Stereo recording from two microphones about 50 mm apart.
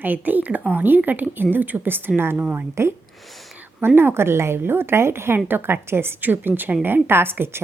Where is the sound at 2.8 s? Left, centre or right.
Right.